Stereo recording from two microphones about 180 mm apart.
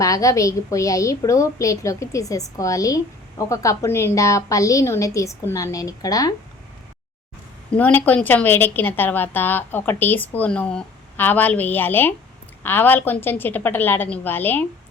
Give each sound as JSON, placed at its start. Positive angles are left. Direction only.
{"t": 0.0, "sound": "a woman's voice", "side_deg": 20}
{"t": 7.8, "sound": "a woman's voice", "side_deg": 10}